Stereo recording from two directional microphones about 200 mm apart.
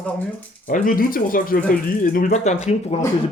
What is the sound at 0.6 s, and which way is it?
Speech, 45° left (ahead or behind).